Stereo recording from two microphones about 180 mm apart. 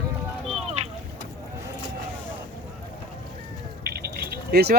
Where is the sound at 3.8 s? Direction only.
60° right (ahead or behind).